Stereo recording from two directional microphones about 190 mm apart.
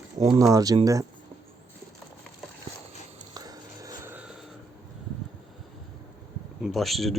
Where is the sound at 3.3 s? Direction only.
20° right (ahead or behind).